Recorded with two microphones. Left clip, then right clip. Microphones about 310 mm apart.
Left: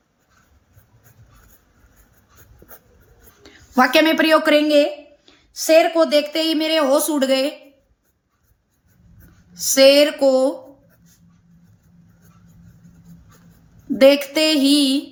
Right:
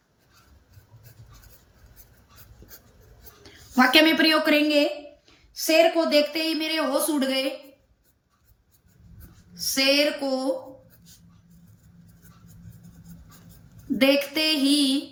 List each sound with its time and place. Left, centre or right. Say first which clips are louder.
3.8 s speech: left 3 dB; centre
9.6 s speech: left 10 dB; left
13.9 s speech: left 8 dB; centre